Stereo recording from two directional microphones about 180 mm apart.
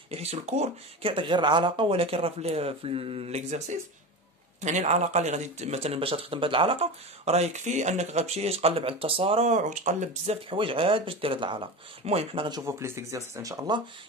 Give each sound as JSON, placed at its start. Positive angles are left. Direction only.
{"t": 0.1, "sound": "speech", "side_deg": -35}